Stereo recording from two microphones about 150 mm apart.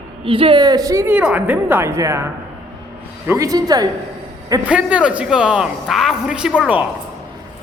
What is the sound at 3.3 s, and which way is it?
Speech, 20° right (ahead or behind).